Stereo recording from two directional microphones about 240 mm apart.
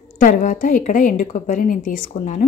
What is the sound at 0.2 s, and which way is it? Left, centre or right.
A woman's voice, left.